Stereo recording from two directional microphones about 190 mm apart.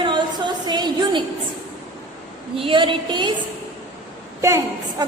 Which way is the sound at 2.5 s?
25° right (ahead or behind).